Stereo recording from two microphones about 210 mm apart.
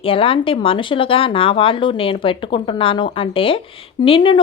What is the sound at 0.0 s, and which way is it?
Speech, 25° left (ahead or behind).